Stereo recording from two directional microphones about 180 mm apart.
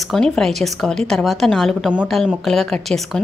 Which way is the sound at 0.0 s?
Centre (ahead or behind).